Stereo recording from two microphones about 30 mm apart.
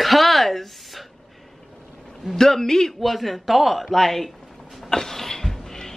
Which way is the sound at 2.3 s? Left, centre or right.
Centre.